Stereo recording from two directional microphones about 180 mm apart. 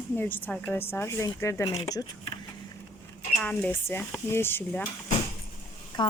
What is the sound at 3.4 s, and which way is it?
A woman's voice, 10° left (ahead or behind).